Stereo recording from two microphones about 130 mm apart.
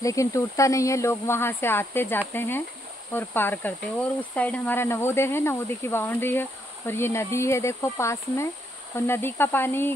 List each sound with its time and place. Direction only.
0.0 s speech: 25° left (ahead or behind)